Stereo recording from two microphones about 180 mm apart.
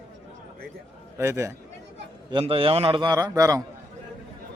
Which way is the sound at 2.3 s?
30° right (ahead or behind).